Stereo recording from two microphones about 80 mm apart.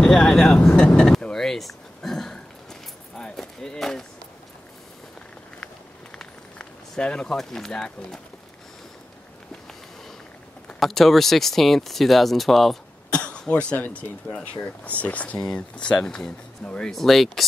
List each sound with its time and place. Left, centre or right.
0.0 s vehicle: centre
6.1 s a sound: centre
10.8 s speech: centre
13.1 s speech: centre
16.9 s speech: centre